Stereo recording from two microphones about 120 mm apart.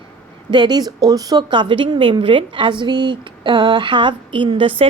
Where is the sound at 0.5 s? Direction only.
40° right (ahead or behind).